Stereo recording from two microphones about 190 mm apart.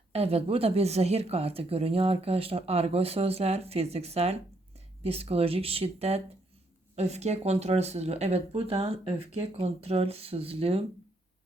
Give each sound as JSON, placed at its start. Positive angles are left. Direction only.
{"t": 0.1, "sound": "a woman's voice", "side_deg": -30}